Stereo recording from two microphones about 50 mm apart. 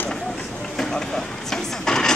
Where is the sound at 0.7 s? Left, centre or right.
Centre.